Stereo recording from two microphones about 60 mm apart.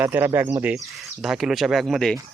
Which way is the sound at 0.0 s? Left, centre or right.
Right.